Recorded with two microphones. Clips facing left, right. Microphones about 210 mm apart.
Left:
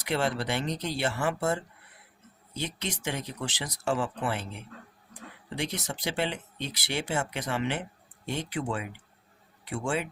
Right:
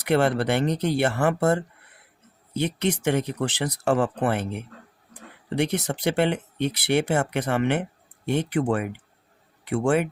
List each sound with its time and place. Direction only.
0.0 s speech: 60° right (ahead or behind)